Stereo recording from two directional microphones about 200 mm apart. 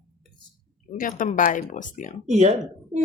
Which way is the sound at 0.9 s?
40° left (ahead or behind).